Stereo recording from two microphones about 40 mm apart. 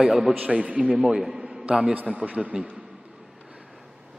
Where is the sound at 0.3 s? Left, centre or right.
Right.